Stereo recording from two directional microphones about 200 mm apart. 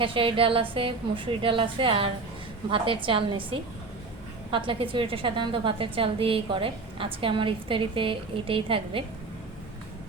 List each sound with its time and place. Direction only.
0.0 s a woman's voice: 25° right (ahead or behind)